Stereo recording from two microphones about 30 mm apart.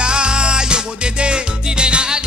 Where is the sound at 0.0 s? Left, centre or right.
Right.